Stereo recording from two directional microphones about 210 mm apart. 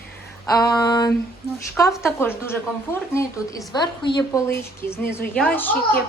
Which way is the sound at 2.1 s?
10° left (ahead or behind).